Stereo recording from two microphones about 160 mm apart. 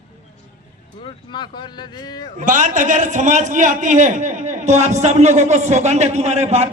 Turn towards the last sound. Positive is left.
turn(degrees=-45)  # may be behind; listen again after turning